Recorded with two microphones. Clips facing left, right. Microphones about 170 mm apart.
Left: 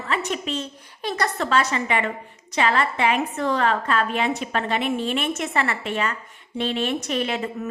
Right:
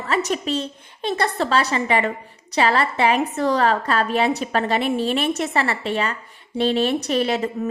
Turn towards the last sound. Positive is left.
turn(degrees=-35)  # may be behind; listen again after turning